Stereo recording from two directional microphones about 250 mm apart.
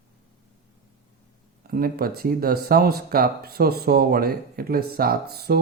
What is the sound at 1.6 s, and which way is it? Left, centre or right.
Speech, right.